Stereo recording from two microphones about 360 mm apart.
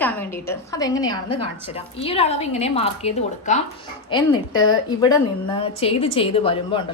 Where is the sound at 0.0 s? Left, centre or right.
Centre.